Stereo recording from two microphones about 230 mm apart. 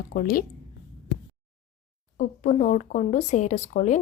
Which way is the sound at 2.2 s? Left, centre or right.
Left.